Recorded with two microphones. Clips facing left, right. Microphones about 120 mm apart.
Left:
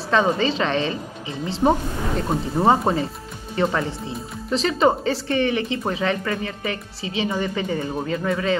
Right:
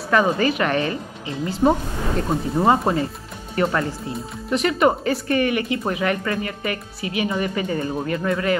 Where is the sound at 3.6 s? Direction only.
25° left (ahead or behind).